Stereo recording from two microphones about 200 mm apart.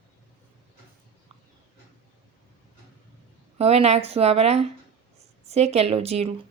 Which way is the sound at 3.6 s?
30° right (ahead or behind).